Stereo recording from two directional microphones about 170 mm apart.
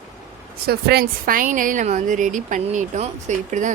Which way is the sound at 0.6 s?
65° right (ahead or behind).